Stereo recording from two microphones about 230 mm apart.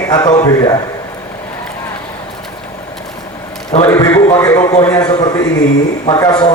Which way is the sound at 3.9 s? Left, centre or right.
Centre.